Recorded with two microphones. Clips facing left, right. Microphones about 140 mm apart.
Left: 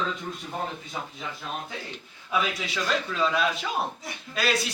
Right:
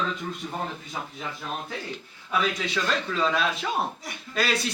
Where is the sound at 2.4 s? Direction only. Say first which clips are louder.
Right 3 dB; centre (ahead or behind).